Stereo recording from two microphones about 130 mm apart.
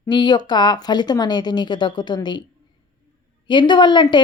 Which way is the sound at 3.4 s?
35° left (ahead or behind).